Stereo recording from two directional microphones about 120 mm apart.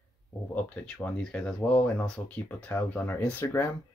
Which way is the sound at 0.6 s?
10° left (ahead or behind).